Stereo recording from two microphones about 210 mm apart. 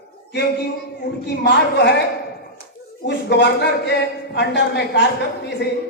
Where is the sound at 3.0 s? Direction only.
55° left (ahead or behind).